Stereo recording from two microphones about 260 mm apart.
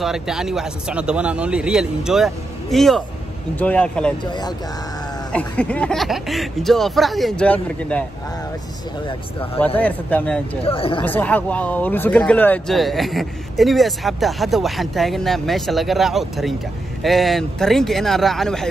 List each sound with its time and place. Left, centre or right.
0.0 s speech: centre
4.2 s speech: centre
5.3 s speech: centre
9.8 s speech: centre
10.6 s speech: left
11.1 s speech: centre